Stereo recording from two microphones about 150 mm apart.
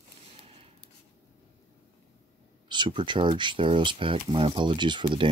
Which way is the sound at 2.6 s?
30° right (ahead or behind).